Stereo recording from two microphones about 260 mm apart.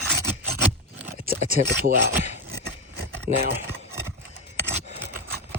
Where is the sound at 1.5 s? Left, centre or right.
Right.